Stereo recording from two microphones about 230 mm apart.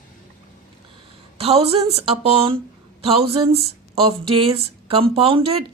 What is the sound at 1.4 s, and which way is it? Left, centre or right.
Speech, right.